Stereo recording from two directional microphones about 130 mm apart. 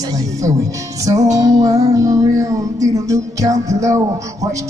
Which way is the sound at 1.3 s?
30° right (ahead or behind).